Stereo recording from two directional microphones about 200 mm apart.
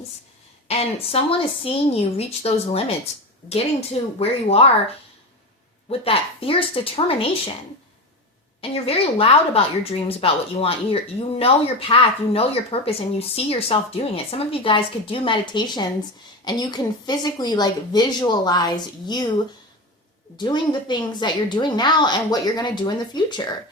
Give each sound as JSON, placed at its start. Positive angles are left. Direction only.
{"t": 0.7, "sound": "speech", "side_deg": 30}
{"t": 5.9, "sound": "speech", "side_deg": 30}
{"t": 8.7, "sound": "speech", "side_deg": 30}
{"t": 20.3, "sound": "speech", "side_deg": 20}